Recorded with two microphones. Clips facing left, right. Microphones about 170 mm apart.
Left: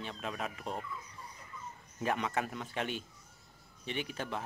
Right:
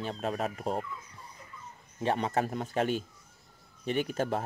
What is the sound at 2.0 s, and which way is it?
Speech, 35° right (ahead or behind).